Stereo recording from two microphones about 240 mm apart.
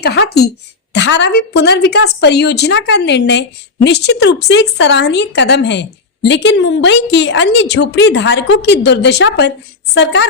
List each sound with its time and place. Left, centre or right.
0.0 s speech: left